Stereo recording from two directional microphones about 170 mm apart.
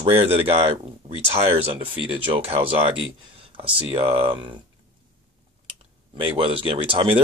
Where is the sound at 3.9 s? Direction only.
30° right (ahead or behind).